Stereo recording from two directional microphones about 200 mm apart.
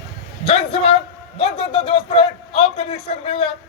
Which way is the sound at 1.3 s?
30° left (ahead or behind).